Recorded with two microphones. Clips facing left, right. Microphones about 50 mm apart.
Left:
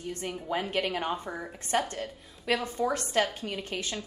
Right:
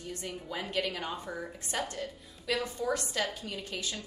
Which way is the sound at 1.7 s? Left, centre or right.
Left.